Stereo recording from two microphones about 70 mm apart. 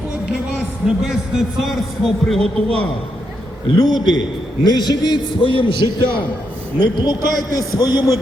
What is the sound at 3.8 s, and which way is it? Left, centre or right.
A man's voice, left.